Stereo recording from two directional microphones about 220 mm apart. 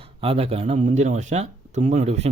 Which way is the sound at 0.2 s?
25° right (ahead or behind).